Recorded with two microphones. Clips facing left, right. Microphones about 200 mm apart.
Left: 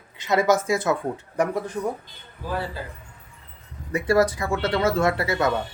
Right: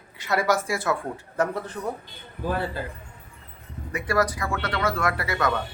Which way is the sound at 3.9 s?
25° left (ahead or behind).